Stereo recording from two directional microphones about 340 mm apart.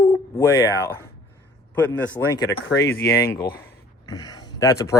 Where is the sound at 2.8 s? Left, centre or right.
Centre.